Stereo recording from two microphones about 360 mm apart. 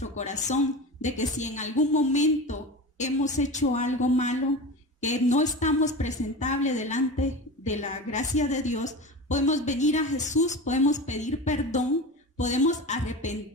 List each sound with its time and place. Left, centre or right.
0.0 s a woman's voice: centre